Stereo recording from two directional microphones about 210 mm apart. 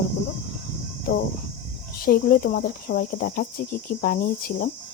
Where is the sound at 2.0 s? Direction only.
45° left (ahead or behind).